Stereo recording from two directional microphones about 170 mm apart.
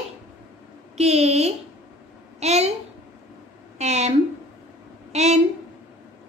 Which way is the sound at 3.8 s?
40° right (ahead or behind).